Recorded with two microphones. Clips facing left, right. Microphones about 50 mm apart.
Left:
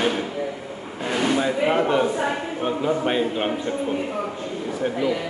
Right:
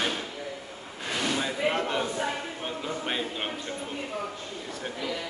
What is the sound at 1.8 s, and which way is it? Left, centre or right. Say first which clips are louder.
A man's voice: left 8 dB; left.